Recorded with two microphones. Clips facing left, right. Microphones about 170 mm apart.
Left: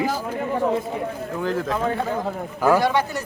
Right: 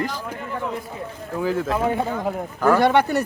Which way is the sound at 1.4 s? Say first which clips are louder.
Right 2 dB; 5° right (ahead or behind).